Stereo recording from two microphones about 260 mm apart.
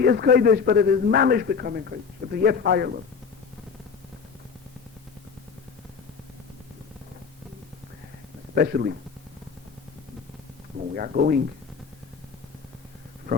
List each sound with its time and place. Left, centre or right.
0.0 s a man's voice: right
8.5 s a man's voice: right
10.9 s a man's voice: right